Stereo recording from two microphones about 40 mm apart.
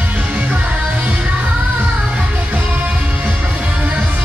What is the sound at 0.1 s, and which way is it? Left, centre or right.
Music, right.